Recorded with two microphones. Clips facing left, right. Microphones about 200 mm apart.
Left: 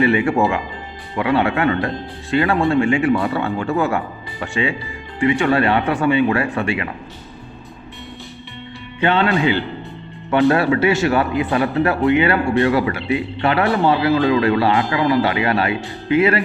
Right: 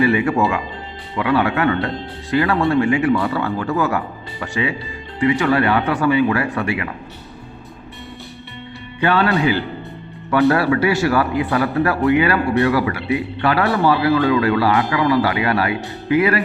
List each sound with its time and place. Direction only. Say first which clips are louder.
0.0 s speech: even; 25° left (ahead or behind)
9.0 s speech: even; 25° left (ahead or behind)